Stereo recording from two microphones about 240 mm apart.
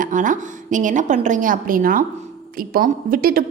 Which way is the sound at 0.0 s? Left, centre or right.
Right.